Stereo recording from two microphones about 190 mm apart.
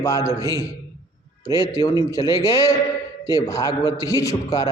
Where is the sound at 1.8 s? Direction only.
20° left (ahead or behind).